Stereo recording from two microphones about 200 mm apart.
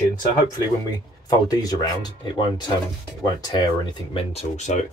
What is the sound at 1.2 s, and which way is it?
Speech, 20° left (ahead or behind).